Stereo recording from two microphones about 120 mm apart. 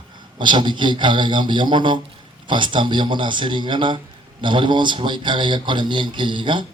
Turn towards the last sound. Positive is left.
turn(degrees=-40)  # may be behind; listen again after turning